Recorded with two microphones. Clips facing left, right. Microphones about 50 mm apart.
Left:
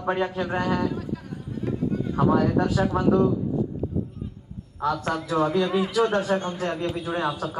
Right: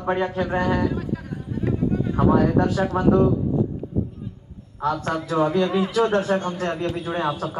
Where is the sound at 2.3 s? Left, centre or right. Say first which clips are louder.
Right 3 dB; right.